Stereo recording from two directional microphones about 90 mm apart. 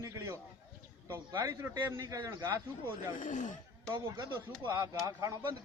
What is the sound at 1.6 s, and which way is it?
A man's voice, 30° right (ahead or behind).